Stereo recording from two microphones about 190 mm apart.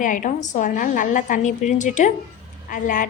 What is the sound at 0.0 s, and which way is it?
A woman's voice, 45° left (ahead or behind).